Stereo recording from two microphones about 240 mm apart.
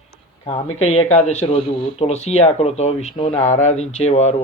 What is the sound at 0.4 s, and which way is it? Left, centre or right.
Speech, left.